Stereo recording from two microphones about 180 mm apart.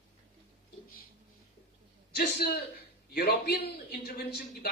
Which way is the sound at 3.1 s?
60° left (ahead or behind).